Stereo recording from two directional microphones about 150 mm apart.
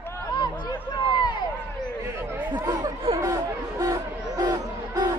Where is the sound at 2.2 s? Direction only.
15° right (ahead or behind).